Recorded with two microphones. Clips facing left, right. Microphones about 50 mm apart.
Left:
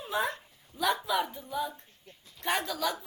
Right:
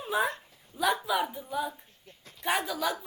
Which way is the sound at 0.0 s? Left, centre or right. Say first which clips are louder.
Right 2 dB; centre.